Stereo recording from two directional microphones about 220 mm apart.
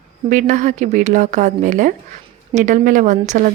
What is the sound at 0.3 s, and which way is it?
A woman's voice, 35° right (ahead or behind).